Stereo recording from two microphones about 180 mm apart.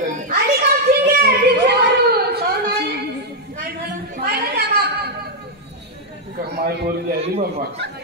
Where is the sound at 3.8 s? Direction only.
60° right (ahead or behind).